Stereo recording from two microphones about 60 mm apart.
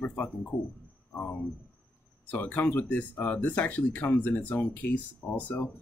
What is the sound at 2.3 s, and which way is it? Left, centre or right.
Speech, left.